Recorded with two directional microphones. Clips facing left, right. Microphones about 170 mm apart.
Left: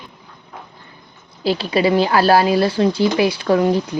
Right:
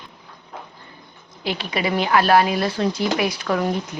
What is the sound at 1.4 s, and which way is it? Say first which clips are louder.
Speech: left 7 dB; 30° left (ahead or behind).